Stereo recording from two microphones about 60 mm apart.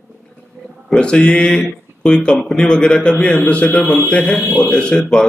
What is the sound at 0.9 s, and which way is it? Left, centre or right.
Speech, centre.